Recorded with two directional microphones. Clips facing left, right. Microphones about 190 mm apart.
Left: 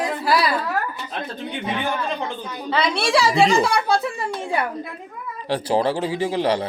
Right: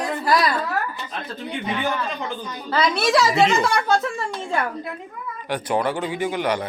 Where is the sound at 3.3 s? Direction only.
35° left (ahead or behind).